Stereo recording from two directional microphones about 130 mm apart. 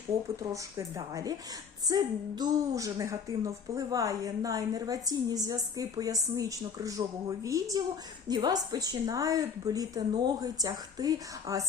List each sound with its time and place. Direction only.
0.5 s a woman's voice: 25° right (ahead or behind)